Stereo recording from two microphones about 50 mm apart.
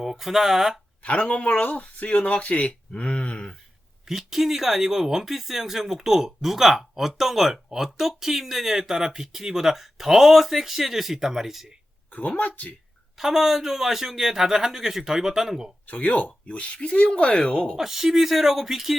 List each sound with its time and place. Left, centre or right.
0.0 s speech: centre
1.0 s speech: left
4.0 s speech: centre
12.4 s speech: left
13.1 s speech: centre
15.9 s speech: left; by 17.7 s centre
17.7 s speech: centre